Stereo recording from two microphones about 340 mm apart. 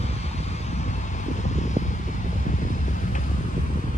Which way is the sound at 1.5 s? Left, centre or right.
Left.